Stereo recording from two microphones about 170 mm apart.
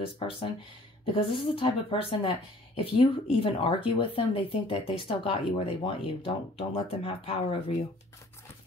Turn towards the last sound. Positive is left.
turn(degrees=35)  # may be behind; listen again after turning